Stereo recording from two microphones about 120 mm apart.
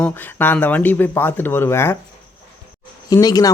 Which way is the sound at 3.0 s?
30° left (ahead or behind).